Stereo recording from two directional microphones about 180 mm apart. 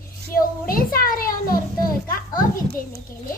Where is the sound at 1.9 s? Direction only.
50° left (ahead or behind).